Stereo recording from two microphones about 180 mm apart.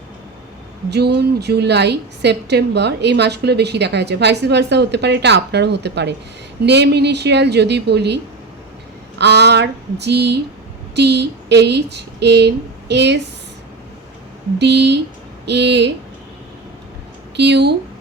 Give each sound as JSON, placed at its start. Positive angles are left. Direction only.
{"t": 0.9, "sound": "a woman's voice", "side_deg": -65}
{"t": 14.6, "sound": "a woman's voice", "side_deg": -70}
{"t": 17.3, "sound": "a woman's voice", "side_deg": -70}